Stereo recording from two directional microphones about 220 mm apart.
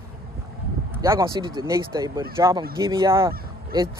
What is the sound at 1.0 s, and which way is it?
Speech, 15° right (ahead or behind).